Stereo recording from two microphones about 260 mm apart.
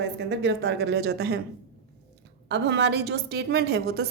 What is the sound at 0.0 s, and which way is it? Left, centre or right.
A woman's voice, right.